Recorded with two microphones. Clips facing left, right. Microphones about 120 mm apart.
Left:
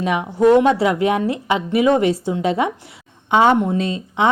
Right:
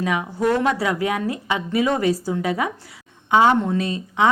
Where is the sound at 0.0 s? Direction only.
25° left (ahead or behind).